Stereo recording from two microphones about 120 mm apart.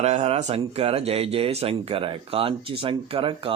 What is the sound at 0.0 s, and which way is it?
Speech, 60° right (ahead or behind).